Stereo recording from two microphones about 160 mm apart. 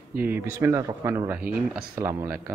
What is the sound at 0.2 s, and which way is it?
Speech, 15° right (ahead or behind).